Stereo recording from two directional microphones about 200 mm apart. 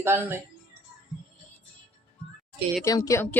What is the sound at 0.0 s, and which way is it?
Speech, 10° right (ahead or behind).